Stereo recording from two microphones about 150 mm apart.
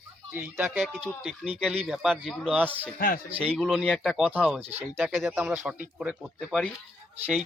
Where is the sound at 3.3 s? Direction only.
40° right (ahead or behind).